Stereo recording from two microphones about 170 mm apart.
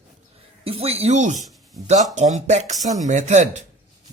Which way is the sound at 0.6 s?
35° right (ahead or behind).